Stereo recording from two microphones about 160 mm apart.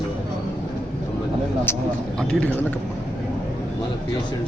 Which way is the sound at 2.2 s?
5° left (ahead or behind).